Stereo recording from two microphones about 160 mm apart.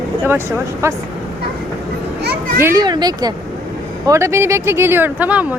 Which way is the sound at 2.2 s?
85° right.